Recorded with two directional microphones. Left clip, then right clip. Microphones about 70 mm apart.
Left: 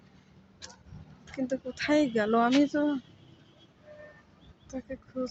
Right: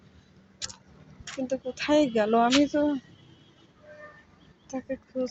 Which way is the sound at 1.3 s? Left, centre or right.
Centre.